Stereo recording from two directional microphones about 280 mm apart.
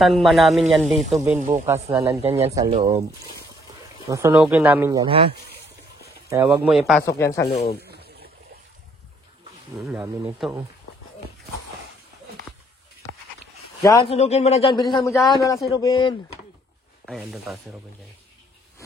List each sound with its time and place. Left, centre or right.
0.0 s speech: centre
4.1 s speech: centre
7.1 s a man's voice: centre
7.5 s speech: left
7.8 s a sound: right
9.8 s speech: centre
13.8 s a man's voice: centre
17.0 s speech: centre